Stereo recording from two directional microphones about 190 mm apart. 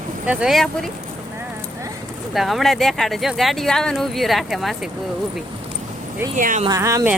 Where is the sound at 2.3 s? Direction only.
Centre (ahead or behind).